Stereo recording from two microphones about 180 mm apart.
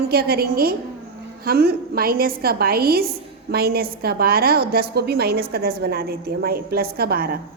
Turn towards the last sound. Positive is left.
turn(degrees=-60)  # may be behind; listen again after turning